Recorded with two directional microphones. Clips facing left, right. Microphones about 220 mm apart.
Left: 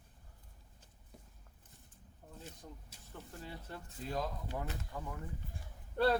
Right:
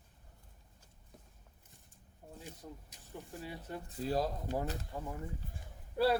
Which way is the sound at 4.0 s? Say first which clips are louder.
Right 5 dB; 35° right (ahead or behind).